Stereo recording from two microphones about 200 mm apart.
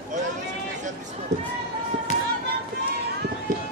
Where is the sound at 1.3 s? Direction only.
35° right (ahead or behind).